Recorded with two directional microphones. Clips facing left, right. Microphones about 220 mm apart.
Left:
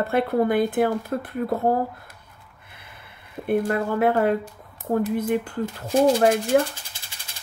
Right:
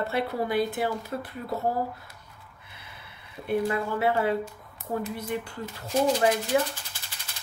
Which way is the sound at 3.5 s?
50° left (ahead or behind).